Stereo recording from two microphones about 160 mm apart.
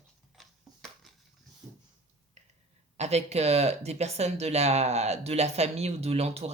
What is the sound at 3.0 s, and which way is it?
Speech, 45° right (ahead or behind).